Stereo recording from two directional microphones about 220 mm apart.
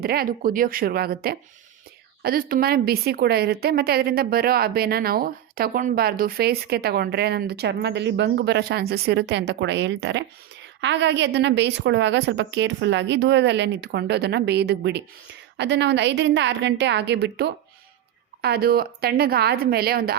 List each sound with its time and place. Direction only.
0.0 s a woman's voice: 45° right (ahead or behind)